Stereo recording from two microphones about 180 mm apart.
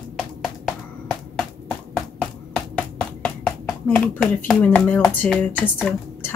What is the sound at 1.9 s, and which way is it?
Music, 5° left (ahead or behind).